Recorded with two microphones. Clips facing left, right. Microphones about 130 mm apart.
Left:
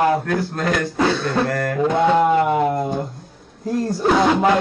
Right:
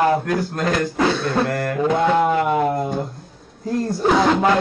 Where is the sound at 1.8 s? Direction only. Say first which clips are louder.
Left 1 dB; centre (ahead or behind).